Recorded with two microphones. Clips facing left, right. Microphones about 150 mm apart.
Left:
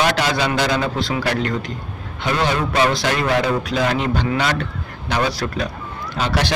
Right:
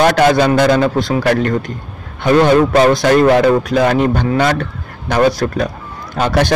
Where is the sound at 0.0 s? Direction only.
50° right (ahead or behind).